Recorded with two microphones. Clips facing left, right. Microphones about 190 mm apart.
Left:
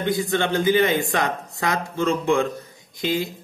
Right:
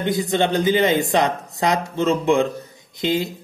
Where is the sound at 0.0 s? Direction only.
20° right (ahead or behind).